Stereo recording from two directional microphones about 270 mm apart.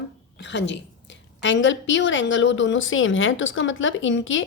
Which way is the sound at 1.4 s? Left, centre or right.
Left.